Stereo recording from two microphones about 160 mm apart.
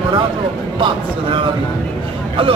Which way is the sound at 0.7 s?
35° right (ahead or behind).